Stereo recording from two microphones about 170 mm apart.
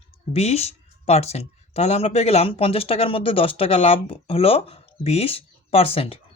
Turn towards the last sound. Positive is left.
turn(degrees=35)  # may be behind; listen again after turning